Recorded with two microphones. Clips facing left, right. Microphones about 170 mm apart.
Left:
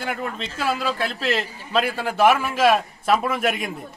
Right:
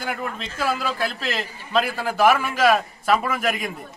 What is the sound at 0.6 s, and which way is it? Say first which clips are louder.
A man's voice: even; centre (ahead or behind).